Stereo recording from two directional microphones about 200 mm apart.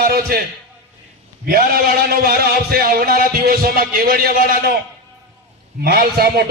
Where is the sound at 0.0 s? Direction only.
50° right (ahead or behind).